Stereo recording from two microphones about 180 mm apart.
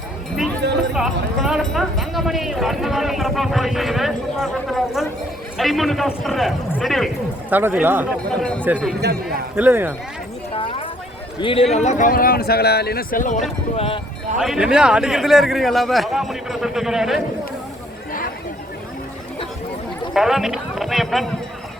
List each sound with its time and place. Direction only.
0.6 s speech: 70° right (ahead or behind)
0.9 s speech: centre (ahead or behind)
7.5 s speech: 10° right (ahead or behind)
8.4 s speech: 5° left (ahead or behind)
9.0 s speech: 65° right (ahead or behind)
9.6 s speech: 10° right (ahead or behind)
10.5 s clip-clop: 30° left (ahead or behind)
11.3 s speech: 30° left (ahead or behind); by 13.4 s 45° left (ahead or behind)
13.7 s speech: 30° left (ahead or behind)
14.3 s speech: 5° right (ahead or behind)
20.1 s speech: centre (ahead or behind)